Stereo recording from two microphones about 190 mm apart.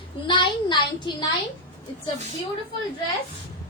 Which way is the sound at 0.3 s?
25° left (ahead or behind).